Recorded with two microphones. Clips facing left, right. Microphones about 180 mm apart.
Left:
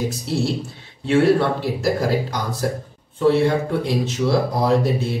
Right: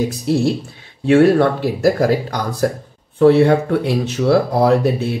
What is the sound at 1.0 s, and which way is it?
Speech, 55° right (ahead or behind).